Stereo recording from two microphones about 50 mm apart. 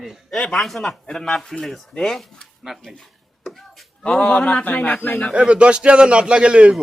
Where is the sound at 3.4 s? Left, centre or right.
Centre.